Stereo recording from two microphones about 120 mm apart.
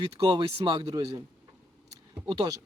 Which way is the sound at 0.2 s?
40° right (ahead or behind).